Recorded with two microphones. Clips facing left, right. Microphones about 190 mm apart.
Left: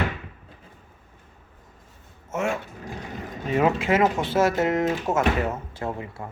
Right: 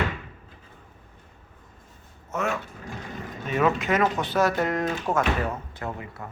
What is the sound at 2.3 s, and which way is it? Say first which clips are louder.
Speech: left 2 dB; 25° left (ahead or behind).